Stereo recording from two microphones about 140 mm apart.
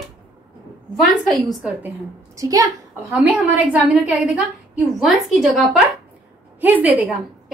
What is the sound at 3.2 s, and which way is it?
A woman's voice, 10° right (ahead or behind).